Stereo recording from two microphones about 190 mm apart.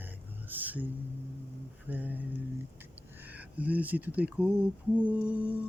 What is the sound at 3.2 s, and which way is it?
Speech, 10° right (ahead or behind).